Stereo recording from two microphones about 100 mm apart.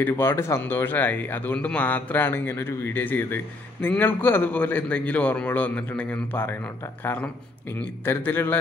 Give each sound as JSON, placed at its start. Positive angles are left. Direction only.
{"t": 0.0, "sound": "a man's voice", "side_deg": 25}